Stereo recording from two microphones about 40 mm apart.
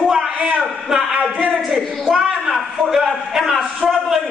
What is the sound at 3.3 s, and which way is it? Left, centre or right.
Speech, centre.